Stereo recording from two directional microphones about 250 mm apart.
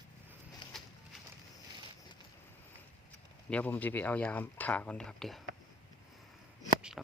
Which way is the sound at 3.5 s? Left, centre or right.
Centre.